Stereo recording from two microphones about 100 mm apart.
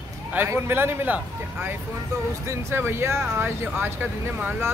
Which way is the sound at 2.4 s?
25° right (ahead or behind).